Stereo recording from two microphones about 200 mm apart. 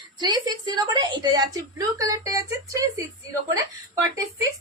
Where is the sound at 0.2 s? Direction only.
20° right (ahead or behind).